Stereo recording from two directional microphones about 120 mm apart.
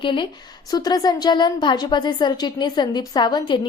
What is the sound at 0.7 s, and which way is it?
A woman's voice, 35° left (ahead or behind).